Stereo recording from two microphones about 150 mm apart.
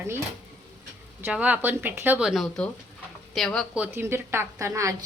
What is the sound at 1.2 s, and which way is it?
A woman's voice, 10° right (ahead or behind).